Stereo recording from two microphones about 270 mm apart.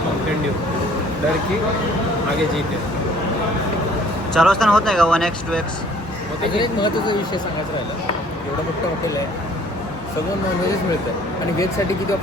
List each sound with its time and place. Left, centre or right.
4.4 s speech: centre
6.6 s speech: centre